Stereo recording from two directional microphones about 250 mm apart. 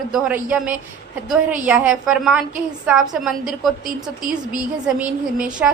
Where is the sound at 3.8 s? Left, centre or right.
Right.